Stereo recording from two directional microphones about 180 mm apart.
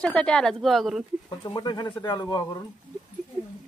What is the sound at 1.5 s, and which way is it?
Speech, 25° left (ahead or behind).